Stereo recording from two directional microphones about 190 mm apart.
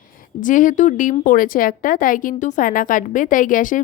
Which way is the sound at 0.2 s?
45° left (ahead or behind).